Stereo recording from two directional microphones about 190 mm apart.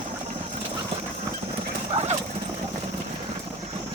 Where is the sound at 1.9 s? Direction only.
35° right (ahead or behind).